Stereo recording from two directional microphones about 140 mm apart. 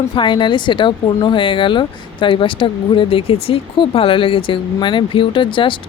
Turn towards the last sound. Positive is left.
turn(degrees=35)  # may be behind; listen again after turning